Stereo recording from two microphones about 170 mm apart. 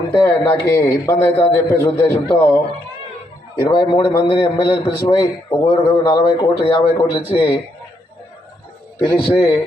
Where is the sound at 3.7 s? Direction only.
25° left (ahead or behind).